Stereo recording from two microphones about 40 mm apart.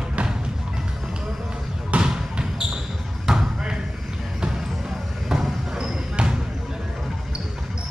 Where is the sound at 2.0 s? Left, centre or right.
Centre.